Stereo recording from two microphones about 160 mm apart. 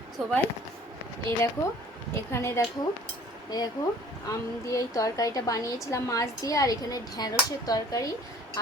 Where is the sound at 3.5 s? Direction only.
25° left (ahead or behind).